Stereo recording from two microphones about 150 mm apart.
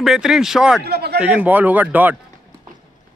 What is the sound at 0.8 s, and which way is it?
Speech, 90° right.